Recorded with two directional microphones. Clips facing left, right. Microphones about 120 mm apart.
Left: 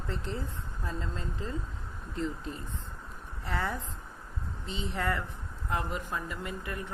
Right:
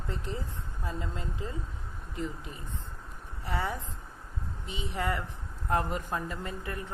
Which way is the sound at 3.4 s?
20° right (ahead or behind).